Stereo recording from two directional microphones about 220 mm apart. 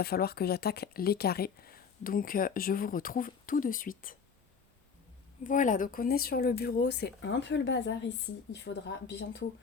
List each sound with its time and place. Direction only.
0.0 s speech: 45° left (ahead or behind)
5.4 s speech: 35° left (ahead or behind); by 9.5 s 55° left (ahead or behind)